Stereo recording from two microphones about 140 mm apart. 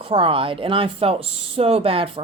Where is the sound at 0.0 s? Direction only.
40° right (ahead or behind).